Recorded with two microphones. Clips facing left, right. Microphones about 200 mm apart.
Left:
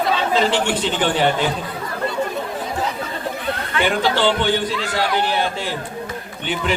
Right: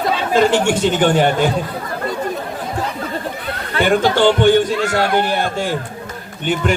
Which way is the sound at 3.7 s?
45° right (ahead or behind).